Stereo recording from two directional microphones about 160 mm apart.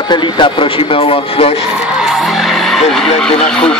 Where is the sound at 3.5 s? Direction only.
5° left (ahead or behind).